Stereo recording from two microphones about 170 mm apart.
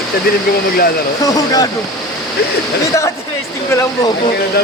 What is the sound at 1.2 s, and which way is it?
Speech, 20° left (ahead or behind).